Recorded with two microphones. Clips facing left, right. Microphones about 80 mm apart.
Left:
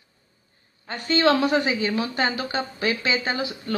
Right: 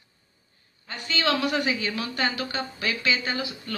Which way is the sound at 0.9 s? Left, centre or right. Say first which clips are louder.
Left 7 dB; left.